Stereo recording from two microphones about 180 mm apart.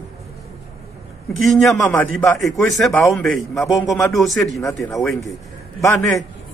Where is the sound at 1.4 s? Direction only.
Centre (ahead or behind).